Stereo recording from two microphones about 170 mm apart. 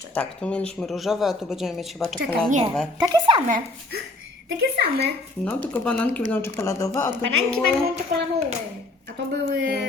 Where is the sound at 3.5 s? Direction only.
60° right (ahead or behind).